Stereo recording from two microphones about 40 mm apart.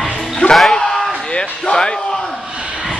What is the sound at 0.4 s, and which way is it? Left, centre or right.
Music, left.